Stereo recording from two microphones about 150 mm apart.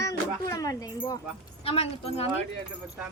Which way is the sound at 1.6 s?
40° left (ahead or behind).